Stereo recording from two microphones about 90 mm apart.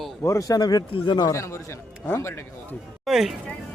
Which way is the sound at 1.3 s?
35° left (ahead or behind).